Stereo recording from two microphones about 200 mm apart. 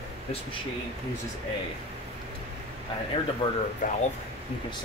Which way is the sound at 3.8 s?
40° left (ahead or behind).